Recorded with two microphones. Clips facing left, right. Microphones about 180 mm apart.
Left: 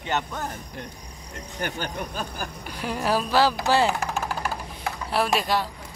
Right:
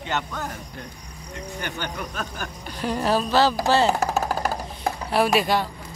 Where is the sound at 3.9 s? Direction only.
40° right (ahead or behind).